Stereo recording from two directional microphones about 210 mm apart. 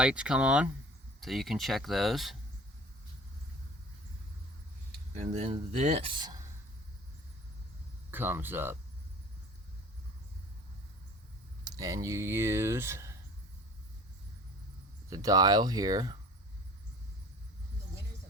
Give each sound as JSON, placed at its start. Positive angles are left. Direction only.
{"t": 0.0, "sound": "speech", "side_deg": -5}
{"t": 5.1, "sound": "speech", "side_deg": -30}
{"t": 8.1, "sound": "speech", "side_deg": -10}
{"t": 11.6, "sound": "speech", "side_deg": -15}
{"t": 15.1, "sound": "speech", "side_deg": -15}